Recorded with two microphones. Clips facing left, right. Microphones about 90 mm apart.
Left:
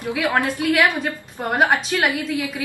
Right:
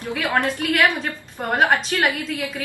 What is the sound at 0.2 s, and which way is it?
Speech, 15° left (ahead or behind).